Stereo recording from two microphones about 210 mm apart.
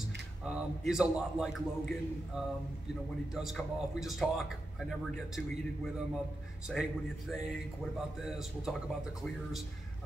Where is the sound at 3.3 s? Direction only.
Centre (ahead or behind).